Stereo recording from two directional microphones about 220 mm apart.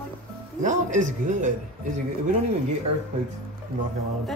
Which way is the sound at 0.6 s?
35° right (ahead or behind).